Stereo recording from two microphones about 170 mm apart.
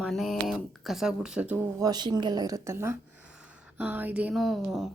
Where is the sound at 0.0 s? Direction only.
Centre (ahead or behind).